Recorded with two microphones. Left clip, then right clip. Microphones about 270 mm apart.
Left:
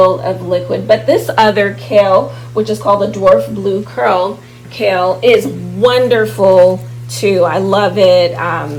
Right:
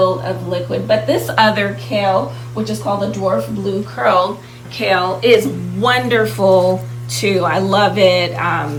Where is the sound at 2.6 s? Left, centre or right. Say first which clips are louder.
Left 7 dB; centre.